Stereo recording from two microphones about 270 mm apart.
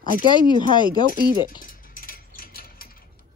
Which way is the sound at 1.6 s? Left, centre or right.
Left.